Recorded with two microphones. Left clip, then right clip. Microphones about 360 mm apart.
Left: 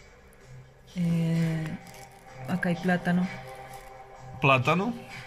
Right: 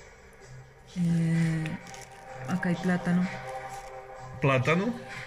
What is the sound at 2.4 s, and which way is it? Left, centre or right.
Speech, left.